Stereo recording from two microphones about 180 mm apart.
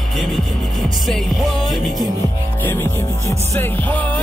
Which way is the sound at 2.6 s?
15° left (ahead or behind).